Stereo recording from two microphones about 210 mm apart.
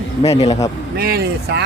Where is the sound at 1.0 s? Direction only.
50° right (ahead or behind).